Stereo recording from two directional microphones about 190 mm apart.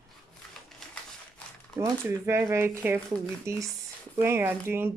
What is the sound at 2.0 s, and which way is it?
Speech, 15° right (ahead or behind).